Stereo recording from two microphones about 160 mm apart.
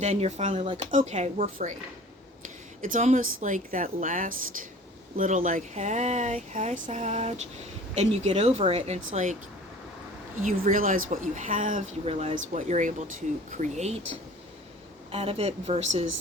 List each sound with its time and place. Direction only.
0.0 s speech: 45° right (ahead or behind)
0.5 s speech: 35° right (ahead or behind)
0.9 s speech: 50° right (ahead or behind)
2.8 s speech: 50° right (ahead or behind)
10.4 s speech: 55° right (ahead or behind)
12.0 s speech: 40° right (ahead or behind)
15.1 s speech: 40° right (ahead or behind)